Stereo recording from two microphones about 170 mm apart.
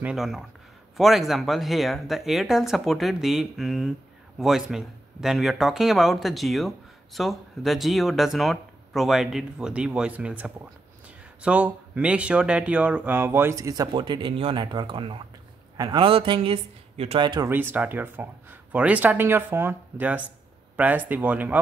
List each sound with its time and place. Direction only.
0.0 s speech: centre (ahead or behind); by 17.5 s 25° right (ahead or behind)
17.5 s speech: 10° right (ahead or behind)